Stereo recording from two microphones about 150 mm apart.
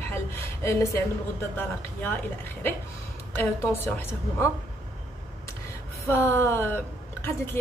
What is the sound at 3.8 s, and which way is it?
Speech, 15° left (ahead or behind).